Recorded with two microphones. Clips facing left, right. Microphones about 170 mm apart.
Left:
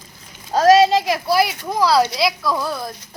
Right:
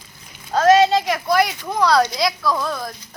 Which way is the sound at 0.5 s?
30° left (ahead or behind).